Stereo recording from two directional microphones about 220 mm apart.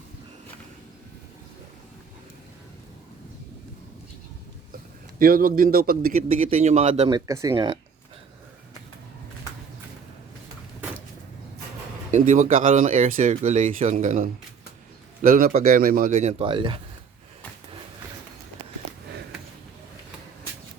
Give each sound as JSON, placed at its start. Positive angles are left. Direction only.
{"t": 5.2, "sound": "speech", "side_deg": -40}
{"t": 7.1, "sound": "speech", "side_deg": -15}
{"t": 12.1, "sound": "speech", "side_deg": -35}